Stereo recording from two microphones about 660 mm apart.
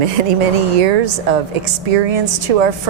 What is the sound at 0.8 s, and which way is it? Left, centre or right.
A woman's voice, right.